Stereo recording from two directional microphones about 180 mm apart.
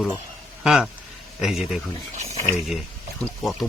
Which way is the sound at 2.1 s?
40° right (ahead or behind).